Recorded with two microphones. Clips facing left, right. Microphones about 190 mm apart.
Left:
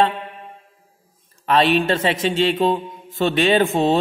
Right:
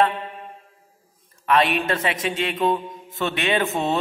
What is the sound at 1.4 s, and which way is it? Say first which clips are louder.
A man's voice: left 3 dB; 30° left (ahead or behind).